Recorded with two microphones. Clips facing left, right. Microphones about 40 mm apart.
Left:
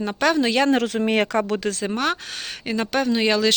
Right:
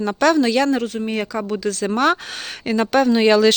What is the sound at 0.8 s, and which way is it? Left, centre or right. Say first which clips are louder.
Speech: left 3 dB; left.